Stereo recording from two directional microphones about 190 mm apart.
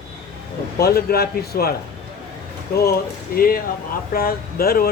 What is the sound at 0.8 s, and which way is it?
Speech, 55° left (ahead or behind).